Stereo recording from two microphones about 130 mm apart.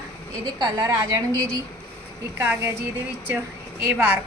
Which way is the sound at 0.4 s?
30° right (ahead or behind).